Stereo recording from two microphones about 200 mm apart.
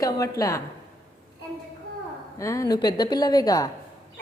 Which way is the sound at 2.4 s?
15° left (ahead or behind).